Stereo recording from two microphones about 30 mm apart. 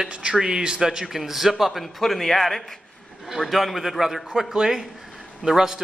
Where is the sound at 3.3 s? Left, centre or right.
Centre.